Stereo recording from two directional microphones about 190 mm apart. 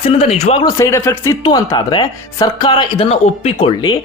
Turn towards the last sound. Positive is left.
turn(degrees=25)  # may be behind; listen again after turning